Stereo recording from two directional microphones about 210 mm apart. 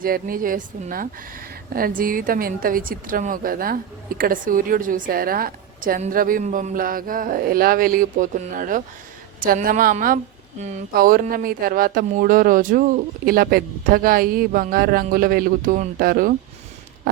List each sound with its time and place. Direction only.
0.0 s a woman's voice: 40° right (ahead or behind)